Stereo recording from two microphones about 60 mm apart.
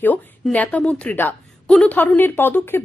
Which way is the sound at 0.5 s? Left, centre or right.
Left.